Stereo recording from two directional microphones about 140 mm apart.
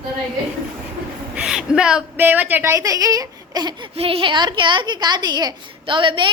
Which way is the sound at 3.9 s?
45° right (ahead or behind).